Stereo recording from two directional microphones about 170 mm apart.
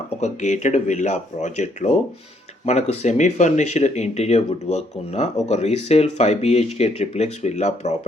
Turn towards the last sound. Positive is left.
turn(degrees=40)  # may be behind; listen again after turning